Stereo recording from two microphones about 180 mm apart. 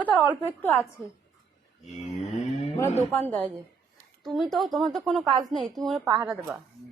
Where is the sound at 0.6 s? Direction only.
10° left (ahead or behind).